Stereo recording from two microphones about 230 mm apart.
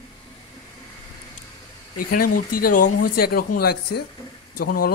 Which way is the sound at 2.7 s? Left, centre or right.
Left.